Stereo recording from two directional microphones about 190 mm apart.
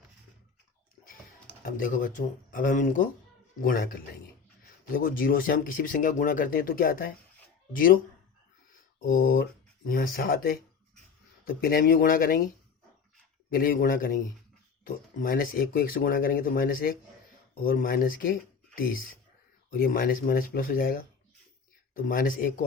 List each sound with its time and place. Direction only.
1.6 s speech: 45° left (ahead or behind)
9.0 s speech: 90° left
9.2 s speech: 50° left (ahead or behind)
13.5 s speech: 50° left (ahead or behind)